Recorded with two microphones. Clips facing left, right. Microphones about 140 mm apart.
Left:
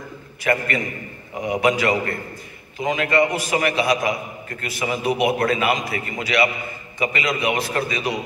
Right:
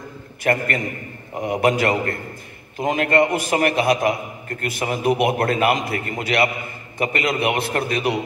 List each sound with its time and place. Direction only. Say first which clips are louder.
0.4 s a man's voice: right 1 dB; 50° right (ahead or behind)